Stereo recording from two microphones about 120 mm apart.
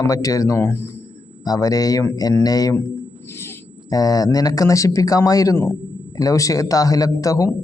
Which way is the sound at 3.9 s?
30° left (ahead or behind).